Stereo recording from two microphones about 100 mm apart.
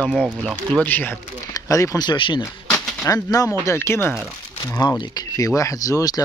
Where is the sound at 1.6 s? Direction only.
35° left (ahead or behind).